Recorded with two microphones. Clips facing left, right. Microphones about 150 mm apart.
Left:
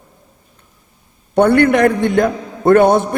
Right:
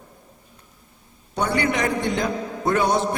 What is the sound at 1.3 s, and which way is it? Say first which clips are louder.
A man's voice: left 12 dB; 60° left (ahead or behind).